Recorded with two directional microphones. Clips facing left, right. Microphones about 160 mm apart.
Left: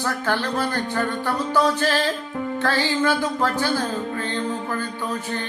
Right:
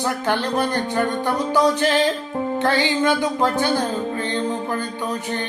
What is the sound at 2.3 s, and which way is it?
Music, 35° right (ahead or behind).